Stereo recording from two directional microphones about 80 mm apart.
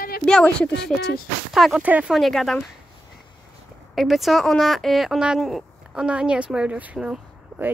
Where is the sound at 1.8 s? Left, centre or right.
Centre.